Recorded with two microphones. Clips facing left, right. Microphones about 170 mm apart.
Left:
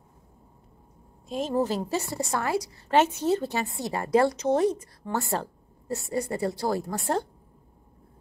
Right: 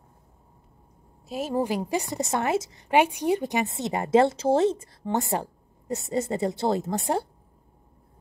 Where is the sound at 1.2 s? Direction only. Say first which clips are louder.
Even; 10° right (ahead or behind).